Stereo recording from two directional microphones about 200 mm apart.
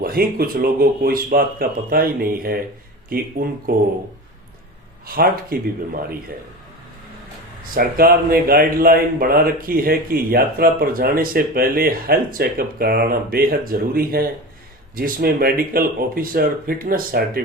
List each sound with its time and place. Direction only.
0.0 s speech: 50° right (ahead or behind)
5.0 s speech: 45° right (ahead or behind)
7.6 s speech: 45° right (ahead or behind)